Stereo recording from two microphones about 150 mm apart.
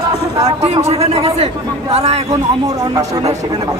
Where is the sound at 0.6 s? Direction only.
45° right (ahead or behind).